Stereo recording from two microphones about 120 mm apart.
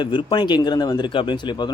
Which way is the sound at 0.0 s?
40° left (ahead or behind).